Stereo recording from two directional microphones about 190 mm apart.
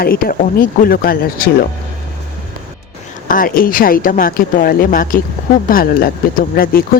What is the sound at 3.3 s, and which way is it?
Speech, 45° left (ahead or behind).